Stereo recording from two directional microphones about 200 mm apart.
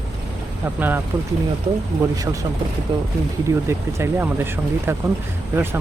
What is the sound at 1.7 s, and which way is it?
Speech, 30° right (ahead or behind).